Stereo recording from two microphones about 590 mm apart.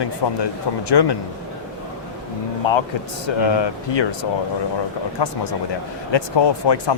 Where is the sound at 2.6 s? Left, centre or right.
Left.